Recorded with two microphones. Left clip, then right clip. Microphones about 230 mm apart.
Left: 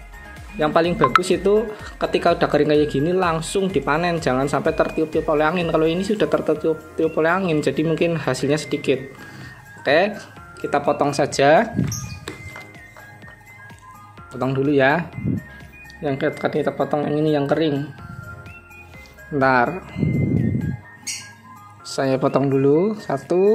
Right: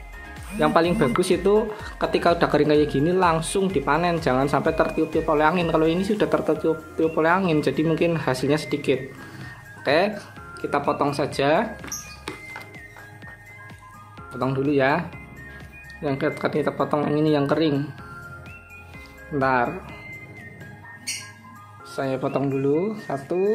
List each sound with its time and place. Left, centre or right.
0.6 s speech: centre
11.7 s music: centre
14.3 s speech: centre
19.4 s speech: centre
21.9 s speech: centre